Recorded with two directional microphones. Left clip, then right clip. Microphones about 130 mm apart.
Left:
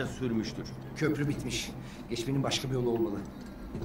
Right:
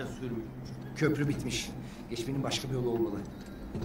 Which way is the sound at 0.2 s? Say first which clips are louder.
Left 5 dB; centre (ahead or behind).